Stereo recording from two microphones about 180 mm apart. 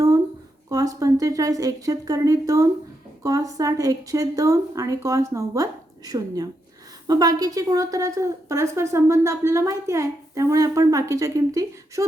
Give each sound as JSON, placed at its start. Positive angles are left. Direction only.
{"t": 0.7, "sound": "a woman's voice", "side_deg": -20}